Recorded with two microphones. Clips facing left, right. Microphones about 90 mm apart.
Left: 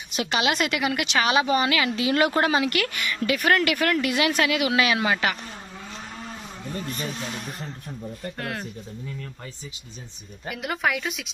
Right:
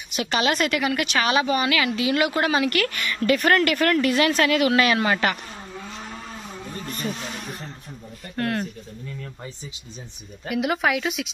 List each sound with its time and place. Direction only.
0.1 s a woman's voice: 20° left (ahead or behind)
3.3 s speech: 5° left (ahead or behind)
8.4 s a woman's voice: 5° left (ahead or behind)
10.5 s a woman's voice: 5° right (ahead or behind)